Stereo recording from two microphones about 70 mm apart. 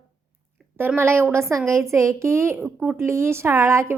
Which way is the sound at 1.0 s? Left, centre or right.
Right.